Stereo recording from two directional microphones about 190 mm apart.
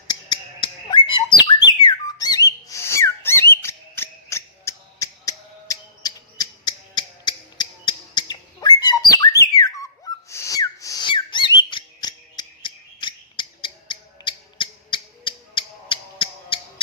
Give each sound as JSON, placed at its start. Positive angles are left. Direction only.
{"t": 0.1, "sound": "bird", "side_deg": 20}
{"t": 1.6, "sound": "whistle", "side_deg": 20}
{"t": 10.2, "sound": "a sound", "side_deg": 15}